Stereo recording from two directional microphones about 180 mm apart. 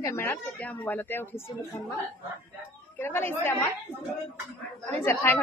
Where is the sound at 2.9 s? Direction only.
10° left (ahead or behind).